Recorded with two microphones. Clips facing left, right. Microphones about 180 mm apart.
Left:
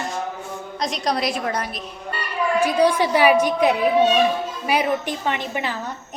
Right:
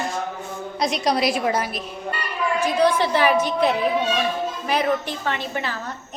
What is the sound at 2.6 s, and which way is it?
Speech, 10° left (ahead or behind).